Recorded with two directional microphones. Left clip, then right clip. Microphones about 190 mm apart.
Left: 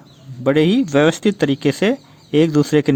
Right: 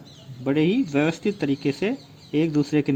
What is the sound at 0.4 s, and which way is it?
Speech, 50° left (ahead or behind).